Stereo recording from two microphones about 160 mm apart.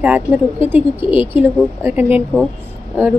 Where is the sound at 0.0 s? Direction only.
10° right (ahead or behind).